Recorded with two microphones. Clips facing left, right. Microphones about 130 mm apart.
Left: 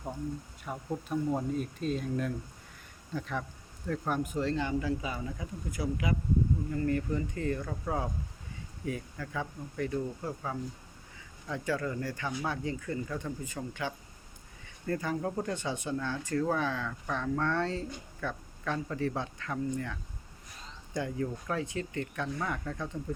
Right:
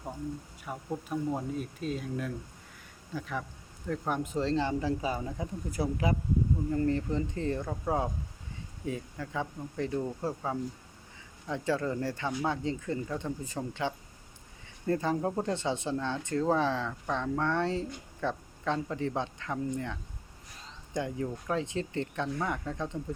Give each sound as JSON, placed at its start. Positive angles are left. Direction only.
{"t": 0.6, "sound": "speech", "side_deg": -5}
{"t": 4.2, "sound": "speech", "side_deg": -25}
{"t": 11.4, "sound": "speech", "side_deg": -25}